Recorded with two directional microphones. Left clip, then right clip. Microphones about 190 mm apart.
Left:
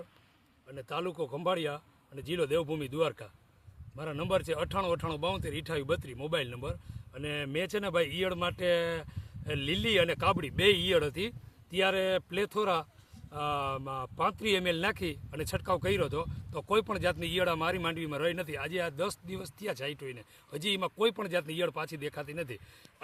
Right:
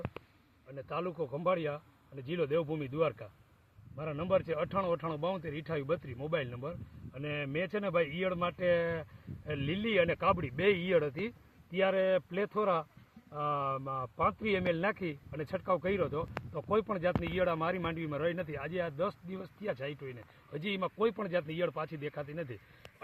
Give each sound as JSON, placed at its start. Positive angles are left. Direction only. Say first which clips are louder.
{"t": 0.8, "sound": "speech", "louder": "left 2 dB", "side_deg": 25}